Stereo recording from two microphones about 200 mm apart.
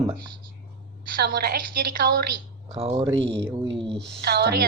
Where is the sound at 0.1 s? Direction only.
20° right (ahead or behind).